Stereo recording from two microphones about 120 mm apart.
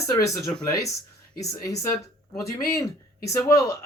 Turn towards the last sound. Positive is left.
turn(degrees=25)  # may be behind; listen again after turning